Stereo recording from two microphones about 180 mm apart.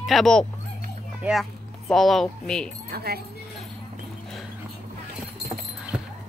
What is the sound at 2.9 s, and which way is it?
Speech, 60° right (ahead or behind).